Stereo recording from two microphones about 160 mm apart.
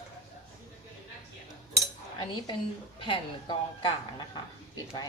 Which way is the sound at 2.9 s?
30° left (ahead or behind).